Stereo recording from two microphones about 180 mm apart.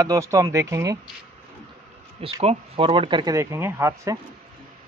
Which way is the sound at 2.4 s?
30° right (ahead or behind).